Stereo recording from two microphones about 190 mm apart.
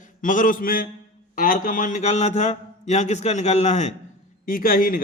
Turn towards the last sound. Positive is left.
turn(degrees=45)  # may be behind; listen again after turning